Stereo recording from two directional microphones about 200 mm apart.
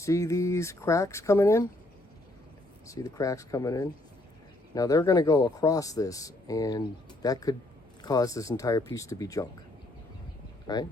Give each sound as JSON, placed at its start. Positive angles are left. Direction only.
{"t": 0.0, "sound": "speech", "side_deg": 15}
{"t": 2.8, "sound": "speech", "side_deg": 15}
{"t": 10.7, "sound": "speech", "side_deg": 20}